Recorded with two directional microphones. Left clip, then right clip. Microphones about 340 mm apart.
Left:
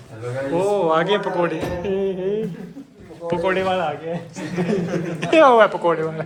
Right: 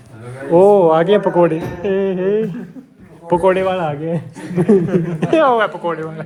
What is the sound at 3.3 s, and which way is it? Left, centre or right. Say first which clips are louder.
Speech: right 6 dB; centre.